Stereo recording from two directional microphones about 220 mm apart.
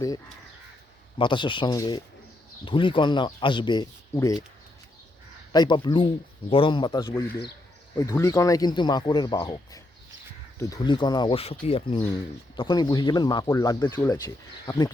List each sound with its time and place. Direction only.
1.2 s speech: 20° left (ahead or behind)
5.5 s speech: 20° left (ahead or behind)